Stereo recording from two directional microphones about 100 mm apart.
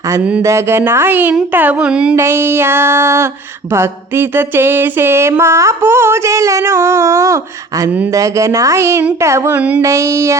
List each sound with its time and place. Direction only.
0.4 s speech: 25° right (ahead or behind); by 2.1 s 10° right (ahead or behind)
2.1 s speech: 25° right (ahead or behind)
5.4 s a sound: 30° right (ahead or behind)
9.2 s speech: 30° right (ahead or behind)
9.6 s speech: 15° right (ahead or behind)
9.8 s a sound: 30° right (ahead or behind)